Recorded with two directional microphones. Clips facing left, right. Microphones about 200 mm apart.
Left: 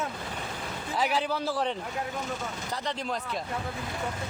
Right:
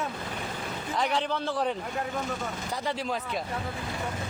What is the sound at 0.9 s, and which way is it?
Speech, 5° left (ahead or behind).